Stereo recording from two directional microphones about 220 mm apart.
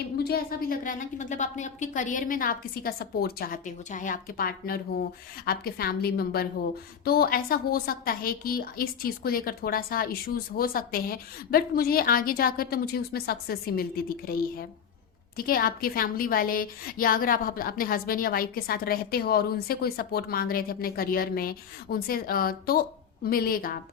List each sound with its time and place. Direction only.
0.2 s a woman's voice: 45° left (ahead or behind)